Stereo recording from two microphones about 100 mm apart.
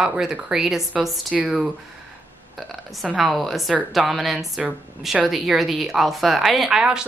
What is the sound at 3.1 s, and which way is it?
A woman's voice, centre (ahead or behind).